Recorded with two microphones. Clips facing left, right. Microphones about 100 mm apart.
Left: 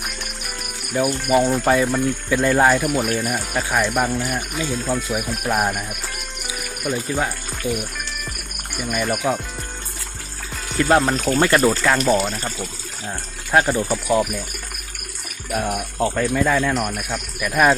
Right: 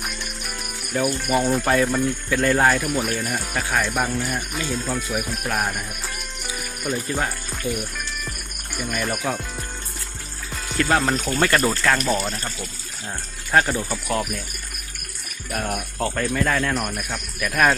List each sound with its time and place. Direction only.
0.0 s speech: centre (ahead or behind)
6.5 s music: 10° left (ahead or behind)
7.6 s speech: 20° left (ahead or behind)
8.8 s speech: 5° left (ahead or behind)
10.8 s speech: 10° left (ahead or behind)
11.0 s speech: centre (ahead or behind)
11.3 s speech: 15° left (ahead or behind)
13.7 s speech: 20° left (ahead or behind)
15.5 s speech: 10° left (ahead or behind)